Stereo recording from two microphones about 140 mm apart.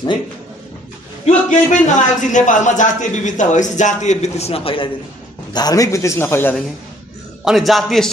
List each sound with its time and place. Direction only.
1.2 s a man's voice: 60° left (ahead or behind); by 4.8 s 45° left (ahead or behind)
5.5 s a man's voice: 30° left (ahead or behind)
7.4 s a man's voice: centre (ahead or behind)